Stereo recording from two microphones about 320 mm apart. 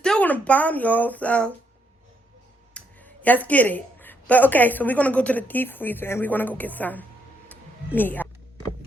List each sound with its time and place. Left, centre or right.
0.0 s speech: centre
2.7 s a woman's voice: centre
7.5 s a sound: centre